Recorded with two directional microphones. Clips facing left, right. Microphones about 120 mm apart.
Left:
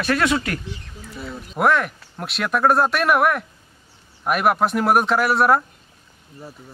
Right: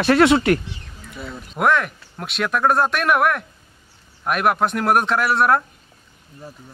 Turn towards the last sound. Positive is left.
turn(degrees=0)  # may be behind; listen again after turning